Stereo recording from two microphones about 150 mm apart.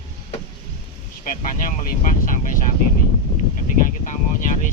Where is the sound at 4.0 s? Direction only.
60° left (ahead or behind).